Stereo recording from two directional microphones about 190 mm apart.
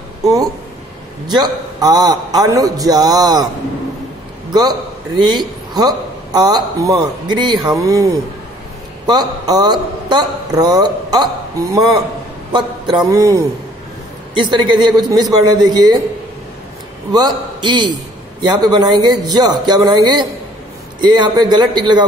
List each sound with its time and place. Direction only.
0.2 s a man's voice: 20° right (ahead or behind)
4.5 s a man's voice: 20° right (ahead or behind)
12.5 s a man's voice: 20° right (ahead or behind)
17.6 s a man's voice: 25° right (ahead or behind)